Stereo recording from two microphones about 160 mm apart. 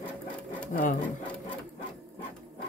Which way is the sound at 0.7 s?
55° left (ahead or behind).